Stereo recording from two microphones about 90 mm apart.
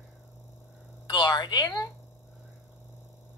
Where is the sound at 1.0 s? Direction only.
50° left (ahead or behind).